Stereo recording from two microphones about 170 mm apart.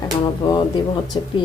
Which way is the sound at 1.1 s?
30° left (ahead or behind).